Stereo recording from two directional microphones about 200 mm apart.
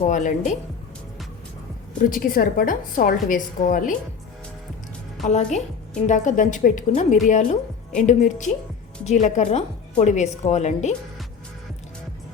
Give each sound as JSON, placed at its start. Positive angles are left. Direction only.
{"t": 0.0, "sound": "a woman's voice", "side_deg": 40}
{"t": 2.0, "sound": "a woman's voice", "side_deg": 45}
{"t": 5.2, "sound": "a woman's voice", "side_deg": 35}